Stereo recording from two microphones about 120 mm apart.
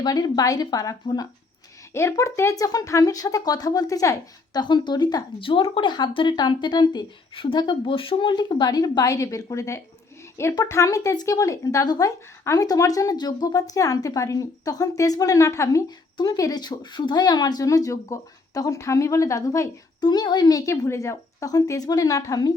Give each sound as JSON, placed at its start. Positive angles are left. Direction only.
{"t": 0.0, "sound": "speech", "side_deg": 30}
{"t": 4.6, "sound": "speech", "side_deg": 40}
{"t": 5.4, "sound": "speech", "side_deg": 45}
{"t": 20.0, "sound": "speech", "side_deg": 35}